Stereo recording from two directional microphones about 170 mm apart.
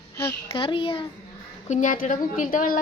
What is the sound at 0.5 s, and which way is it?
Speech, 30° left (ahead or behind).